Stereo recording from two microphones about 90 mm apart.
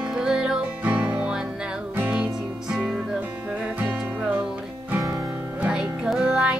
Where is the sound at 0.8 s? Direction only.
20° right (ahead or behind).